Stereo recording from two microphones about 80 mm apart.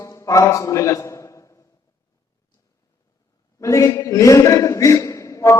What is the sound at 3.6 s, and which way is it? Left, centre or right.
A man's voice, left.